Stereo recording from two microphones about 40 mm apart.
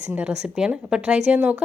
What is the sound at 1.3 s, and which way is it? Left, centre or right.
Speech, right.